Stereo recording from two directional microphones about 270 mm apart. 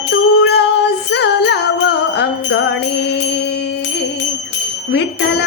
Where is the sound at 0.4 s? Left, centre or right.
Left.